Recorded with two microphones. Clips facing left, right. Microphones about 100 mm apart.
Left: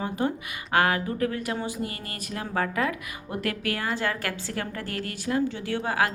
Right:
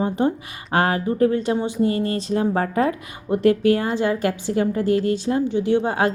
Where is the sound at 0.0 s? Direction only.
25° right (ahead or behind).